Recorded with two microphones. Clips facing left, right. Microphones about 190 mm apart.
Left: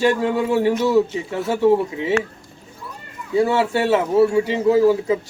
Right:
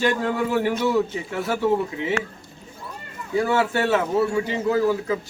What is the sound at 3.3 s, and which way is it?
A man's voice, 25° left (ahead or behind).